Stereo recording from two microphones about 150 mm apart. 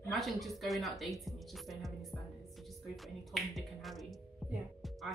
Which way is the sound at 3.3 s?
Centre (ahead or behind).